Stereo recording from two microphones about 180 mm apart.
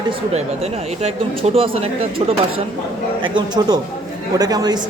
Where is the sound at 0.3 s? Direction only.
35° right (ahead or behind).